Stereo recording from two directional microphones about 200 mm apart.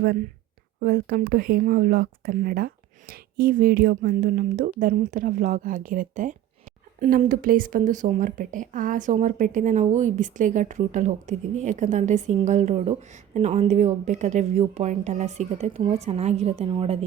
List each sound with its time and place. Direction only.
0.0 s speech: 50° right (ahead or behind); by 17.0 s 25° right (ahead or behind)